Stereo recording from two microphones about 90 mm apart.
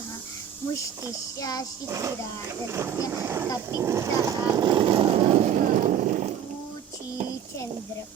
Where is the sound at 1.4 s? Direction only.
45° left (ahead or behind).